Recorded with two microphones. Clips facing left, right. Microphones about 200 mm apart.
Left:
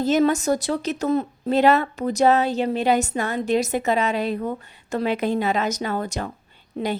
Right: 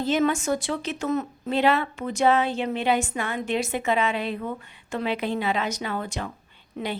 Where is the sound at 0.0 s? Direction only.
40° left (ahead or behind).